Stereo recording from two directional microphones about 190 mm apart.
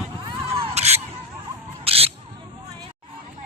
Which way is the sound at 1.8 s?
30° right (ahead or behind).